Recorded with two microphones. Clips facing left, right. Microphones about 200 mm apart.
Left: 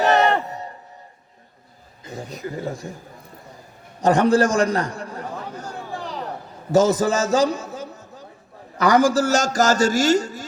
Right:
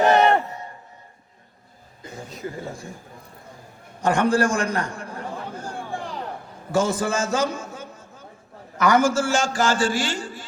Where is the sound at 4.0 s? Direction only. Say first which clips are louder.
Left 4 dB; 40° left (ahead or behind).